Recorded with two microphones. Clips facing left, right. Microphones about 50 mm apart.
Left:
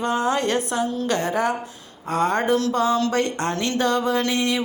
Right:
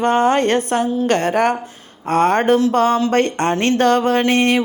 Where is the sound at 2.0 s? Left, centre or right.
Right.